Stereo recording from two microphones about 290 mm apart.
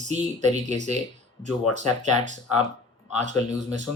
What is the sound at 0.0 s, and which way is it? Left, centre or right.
Speech, right.